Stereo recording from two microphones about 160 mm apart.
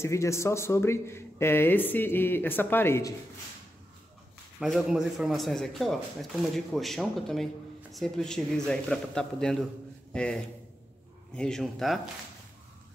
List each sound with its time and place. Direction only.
0.0 s speech: 20° left (ahead or behind)
4.6 s speech: centre (ahead or behind)